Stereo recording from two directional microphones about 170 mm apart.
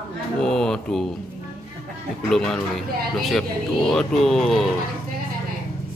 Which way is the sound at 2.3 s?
Centre (ahead or behind).